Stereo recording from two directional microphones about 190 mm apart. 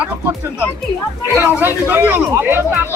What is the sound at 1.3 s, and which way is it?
Speech, 10° right (ahead or behind).